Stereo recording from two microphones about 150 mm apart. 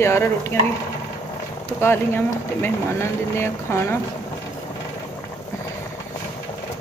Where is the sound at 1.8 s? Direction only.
15° left (ahead or behind).